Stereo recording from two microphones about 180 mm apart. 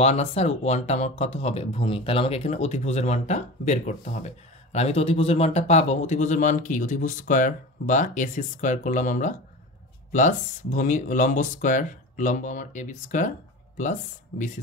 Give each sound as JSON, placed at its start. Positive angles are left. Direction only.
{"t": 0.0, "sound": "speech", "side_deg": 35}